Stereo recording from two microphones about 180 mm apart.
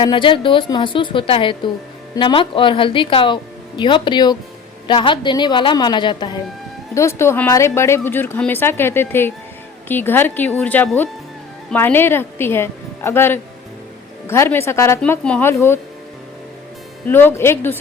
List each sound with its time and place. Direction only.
0.0 s a woman's voice: 30° left (ahead or behind)
17.1 s a woman's voice: 10° left (ahead or behind)